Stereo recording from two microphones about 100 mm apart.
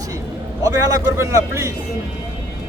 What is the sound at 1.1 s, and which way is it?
Speech, 30° right (ahead or behind).